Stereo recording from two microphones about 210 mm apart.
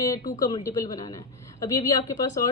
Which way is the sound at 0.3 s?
15° left (ahead or behind).